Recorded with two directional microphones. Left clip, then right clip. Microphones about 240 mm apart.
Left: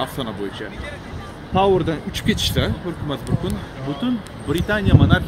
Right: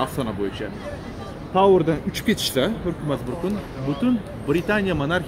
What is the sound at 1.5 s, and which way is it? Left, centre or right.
Speech, centre.